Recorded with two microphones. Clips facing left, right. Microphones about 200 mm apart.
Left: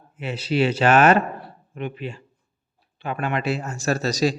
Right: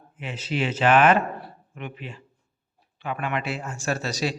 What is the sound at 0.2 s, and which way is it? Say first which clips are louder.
A man's voice: left 6 dB; 40° left (ahead or behind).